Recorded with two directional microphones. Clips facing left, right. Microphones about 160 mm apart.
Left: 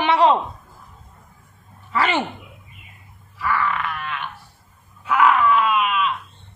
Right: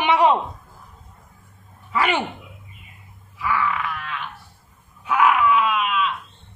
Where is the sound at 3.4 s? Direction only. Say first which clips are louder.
Left 1 dB; 10° right (ahead or behind).